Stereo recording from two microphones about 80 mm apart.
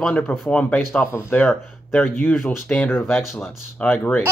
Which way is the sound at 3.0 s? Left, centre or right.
Centre.